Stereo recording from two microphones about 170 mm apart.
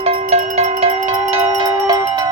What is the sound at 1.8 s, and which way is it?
Music, 25° right (ahead or behind).